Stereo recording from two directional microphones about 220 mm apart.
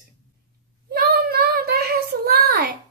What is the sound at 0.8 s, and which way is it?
A child's voice, 45° right (ahead or behind).